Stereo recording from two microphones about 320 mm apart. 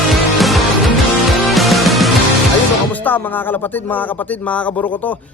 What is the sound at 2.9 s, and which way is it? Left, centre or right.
Speech, centre.